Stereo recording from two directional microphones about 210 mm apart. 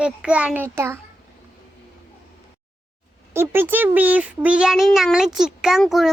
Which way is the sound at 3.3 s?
10° right (ahead or behind).